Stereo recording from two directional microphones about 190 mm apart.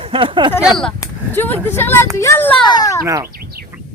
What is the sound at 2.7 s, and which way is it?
Speech, 20° left (ahead or behind).